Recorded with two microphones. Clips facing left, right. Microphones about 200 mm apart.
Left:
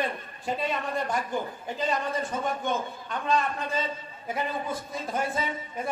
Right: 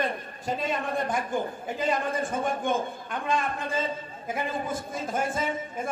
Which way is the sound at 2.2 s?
50° right (ahead or behind).